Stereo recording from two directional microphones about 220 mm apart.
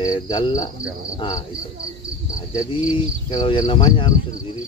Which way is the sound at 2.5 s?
20° left (ahead or behind).